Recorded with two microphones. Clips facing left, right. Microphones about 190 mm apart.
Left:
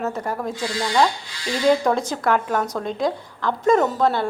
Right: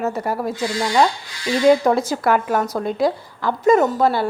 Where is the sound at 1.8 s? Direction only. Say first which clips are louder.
Right 3 dB; 5° right (ahead or behind).